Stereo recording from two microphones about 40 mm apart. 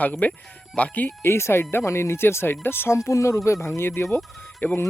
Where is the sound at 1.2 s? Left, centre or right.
Left.